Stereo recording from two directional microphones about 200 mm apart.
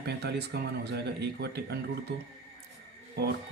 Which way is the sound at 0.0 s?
55° right (ahead or behind).